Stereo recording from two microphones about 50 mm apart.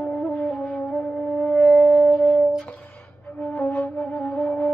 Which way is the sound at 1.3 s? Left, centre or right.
Left.